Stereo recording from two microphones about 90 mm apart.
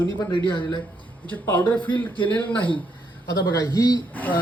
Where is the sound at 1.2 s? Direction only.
20° left (ahead or behind).